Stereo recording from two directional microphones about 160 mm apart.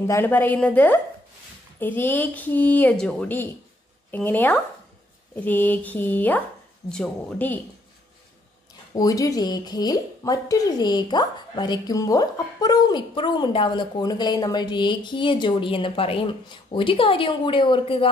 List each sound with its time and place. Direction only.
0.0 s speech: 15° left (ahead or behind)
8.9 s speech: 20° left (ahead or behind)